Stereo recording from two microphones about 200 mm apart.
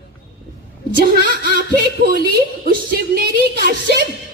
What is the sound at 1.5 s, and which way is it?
Speech, 55° right (ahead or behind).